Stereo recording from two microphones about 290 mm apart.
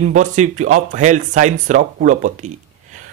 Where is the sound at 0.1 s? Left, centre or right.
Right.